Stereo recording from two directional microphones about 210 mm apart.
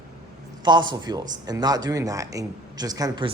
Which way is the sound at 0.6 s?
20° right (ahead or behind).